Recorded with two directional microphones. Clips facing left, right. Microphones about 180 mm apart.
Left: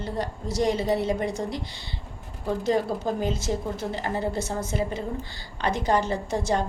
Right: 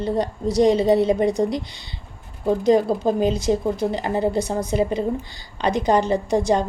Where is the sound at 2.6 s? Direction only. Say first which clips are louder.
Right 7 dB; 15° right (ahead or behind).